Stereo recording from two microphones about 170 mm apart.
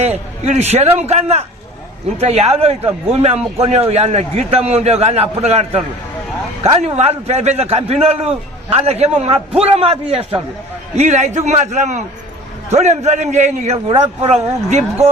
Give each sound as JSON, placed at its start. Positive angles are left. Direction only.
{"t": 0.4, "sound": "a man's voice", "side_deg": -40}